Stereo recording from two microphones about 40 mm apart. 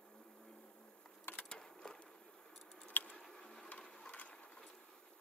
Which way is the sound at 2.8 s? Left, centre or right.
Left.